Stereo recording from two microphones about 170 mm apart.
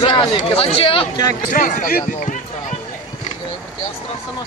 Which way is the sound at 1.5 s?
50° left (ahead or behind).